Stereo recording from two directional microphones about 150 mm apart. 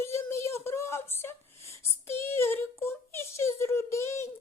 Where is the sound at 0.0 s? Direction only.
15° left (ahead or behind).